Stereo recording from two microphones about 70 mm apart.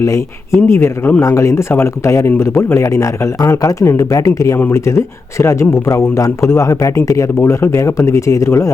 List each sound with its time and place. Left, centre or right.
0.0 s speech: left
1.2 s speech: left
2.8 s speech: left
7.3 s speech: left